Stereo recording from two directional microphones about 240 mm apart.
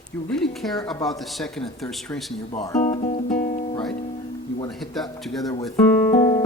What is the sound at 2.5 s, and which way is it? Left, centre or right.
Speech, centre.